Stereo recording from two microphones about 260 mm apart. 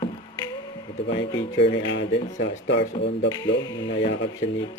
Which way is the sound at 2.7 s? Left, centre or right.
Left.